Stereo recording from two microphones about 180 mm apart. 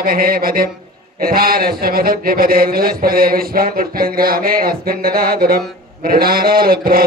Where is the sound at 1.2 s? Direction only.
55° right (ahead or behind).